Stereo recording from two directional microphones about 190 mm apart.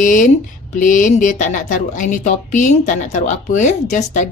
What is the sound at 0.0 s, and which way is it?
Speech, 45° left (ahead or behind).